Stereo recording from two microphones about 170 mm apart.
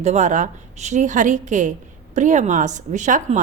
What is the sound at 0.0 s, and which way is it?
A woman's voice, 40° right (ahead or behind).